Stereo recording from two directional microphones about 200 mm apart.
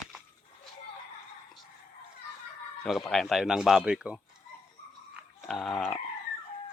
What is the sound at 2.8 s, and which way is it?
Speech, centre (ahead or behind).